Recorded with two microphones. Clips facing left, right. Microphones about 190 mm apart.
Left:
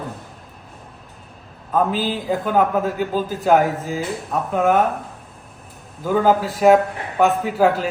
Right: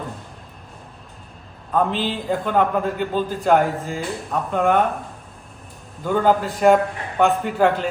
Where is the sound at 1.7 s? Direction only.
5° left (ahead or behind).